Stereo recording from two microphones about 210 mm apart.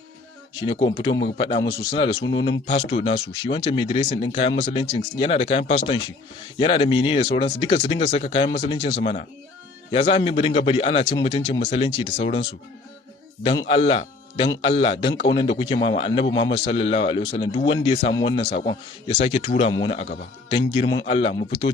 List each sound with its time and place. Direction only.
0.6 s a man's voice: 25° left (ahead or behind)